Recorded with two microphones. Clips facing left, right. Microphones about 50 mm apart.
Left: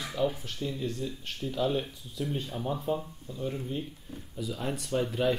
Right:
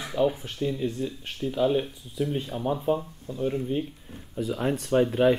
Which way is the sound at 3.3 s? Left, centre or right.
Right.